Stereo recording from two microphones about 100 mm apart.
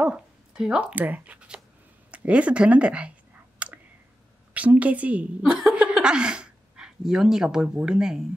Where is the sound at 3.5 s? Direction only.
15° right (ahead or behind).